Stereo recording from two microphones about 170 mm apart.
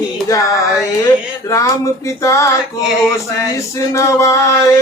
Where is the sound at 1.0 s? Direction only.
20° left (ahead or behind).